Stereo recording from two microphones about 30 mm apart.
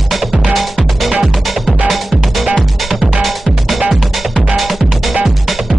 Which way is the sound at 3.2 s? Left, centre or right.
Centre.